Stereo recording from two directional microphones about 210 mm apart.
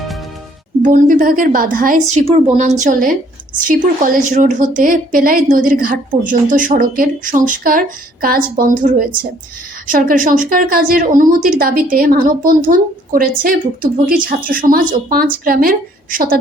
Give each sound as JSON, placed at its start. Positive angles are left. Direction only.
{"t": 0.8, "sound": "a woman's voice", "side_deg": -40}